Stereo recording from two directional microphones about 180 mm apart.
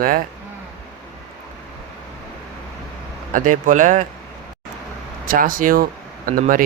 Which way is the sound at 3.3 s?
45° right (ahead or behind).